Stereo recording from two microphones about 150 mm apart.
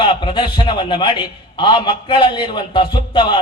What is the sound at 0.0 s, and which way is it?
A man's voice, 35° left (ahead or behind).